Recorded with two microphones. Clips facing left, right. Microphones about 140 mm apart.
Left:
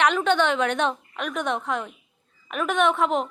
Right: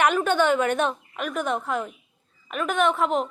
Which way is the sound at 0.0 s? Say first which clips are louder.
Even; 5° right (ahead or behind).